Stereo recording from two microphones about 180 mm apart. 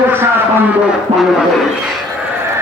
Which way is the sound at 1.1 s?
35° right (ahead or behind).